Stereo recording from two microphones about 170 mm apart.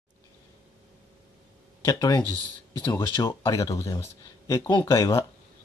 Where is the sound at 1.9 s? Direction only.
20° left (ahead or behind).